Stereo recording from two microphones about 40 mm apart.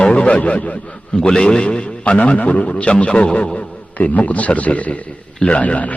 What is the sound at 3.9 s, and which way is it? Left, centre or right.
A man's voice, left.